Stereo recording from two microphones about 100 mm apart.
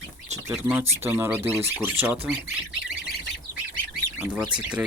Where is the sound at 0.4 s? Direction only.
25° right (ahead or behind).